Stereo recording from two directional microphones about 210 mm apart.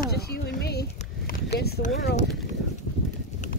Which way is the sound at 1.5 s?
50° left (ahead or behind).